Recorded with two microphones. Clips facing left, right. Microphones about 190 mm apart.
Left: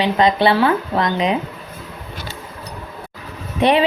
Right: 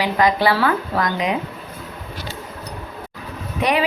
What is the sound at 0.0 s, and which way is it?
A woman's voice, 25° left (ahead or behind).